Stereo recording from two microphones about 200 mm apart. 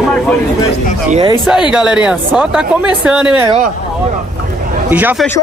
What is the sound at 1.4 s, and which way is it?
Speech, 5° right (ahead or behind).